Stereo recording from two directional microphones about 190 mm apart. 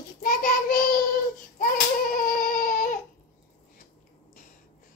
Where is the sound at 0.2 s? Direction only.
45° left (ahead or behind).